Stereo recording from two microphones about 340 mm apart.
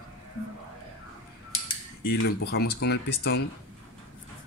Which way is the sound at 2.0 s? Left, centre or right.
Left.